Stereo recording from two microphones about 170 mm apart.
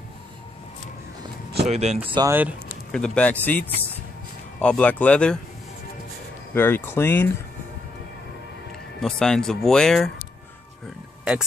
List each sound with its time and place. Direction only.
1.6 s speech: 40° right (ahead or behind)
2.2 s speech: 10° right (ahead or behind)
2.9 s speech: 5° left (ahead or behind)
6.5 s speech: 15° left (ahead or behind)
9.0 s speech: 5° left (ahead or behind)